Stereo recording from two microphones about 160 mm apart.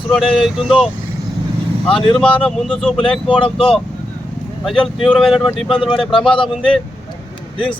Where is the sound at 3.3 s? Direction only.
35° left (ahead or behind).